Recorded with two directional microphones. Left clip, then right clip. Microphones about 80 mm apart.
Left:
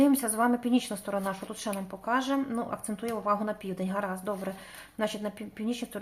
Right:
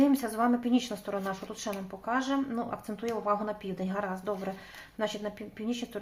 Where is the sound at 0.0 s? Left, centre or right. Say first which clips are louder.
Left 2 dB; left.